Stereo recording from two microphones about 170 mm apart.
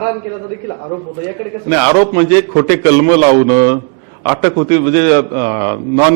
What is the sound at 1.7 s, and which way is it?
A man's voice, 15° right (ahead or behind).